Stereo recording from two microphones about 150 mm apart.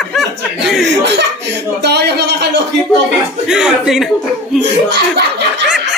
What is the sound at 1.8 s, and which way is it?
Speech, 90° right.